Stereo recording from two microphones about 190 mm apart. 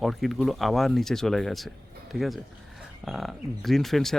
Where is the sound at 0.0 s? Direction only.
Centre (ahead or behind).